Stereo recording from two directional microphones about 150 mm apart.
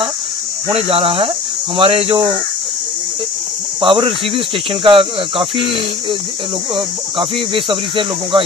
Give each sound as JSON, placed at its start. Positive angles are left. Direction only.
{"t": 0.7, "sound": "speech", "side_deg": -40}
{"t": 3.8, "sound": "speech", "side_deg": -35}